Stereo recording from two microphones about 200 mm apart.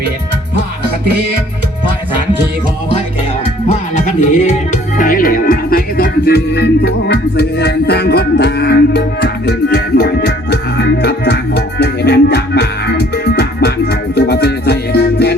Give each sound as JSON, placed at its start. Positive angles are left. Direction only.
{"t": 3.9, "sound": "music", "side_deg": 35}